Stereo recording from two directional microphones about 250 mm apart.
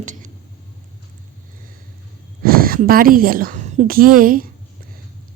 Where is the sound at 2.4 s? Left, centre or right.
Right.